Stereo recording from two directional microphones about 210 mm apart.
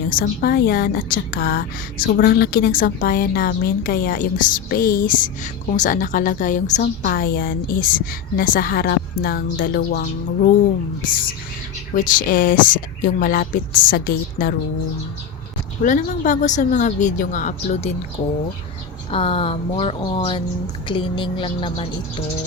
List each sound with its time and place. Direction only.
0.1 s a woman's voice: 45° left (ahead or behind)
11.9 s a woman's voice: 40° left (ahead or behind)
15.8 s a woman's voice: 35° left (ahead or behind)
19.1 s speech: 25° left (ahead or behind)